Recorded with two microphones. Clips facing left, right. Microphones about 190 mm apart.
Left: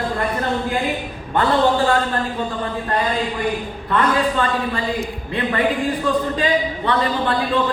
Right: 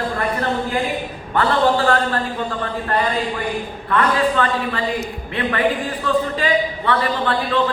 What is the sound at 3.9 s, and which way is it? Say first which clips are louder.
Speech: right 1 dB; 15° left (ahead or behind).